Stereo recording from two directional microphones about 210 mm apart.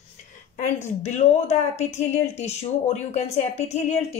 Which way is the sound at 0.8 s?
35° left (ahead or behind).